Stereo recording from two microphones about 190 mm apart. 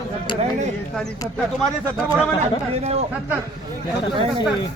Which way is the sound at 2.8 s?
35° right (ahead or behind).